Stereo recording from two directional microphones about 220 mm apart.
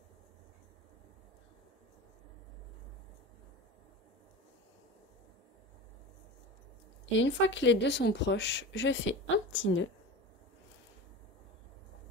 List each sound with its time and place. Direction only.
7.2 s speech: 55° left (ahead or behind)